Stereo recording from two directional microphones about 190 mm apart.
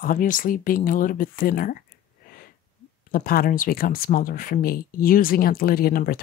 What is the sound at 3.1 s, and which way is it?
Speech, 50° left (ahead or behind).